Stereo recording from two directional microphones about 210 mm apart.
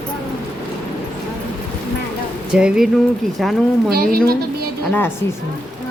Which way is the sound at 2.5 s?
5° right (ahead or behind).